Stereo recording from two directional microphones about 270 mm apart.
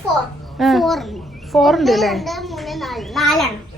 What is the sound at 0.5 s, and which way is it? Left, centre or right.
A child's voice, centre.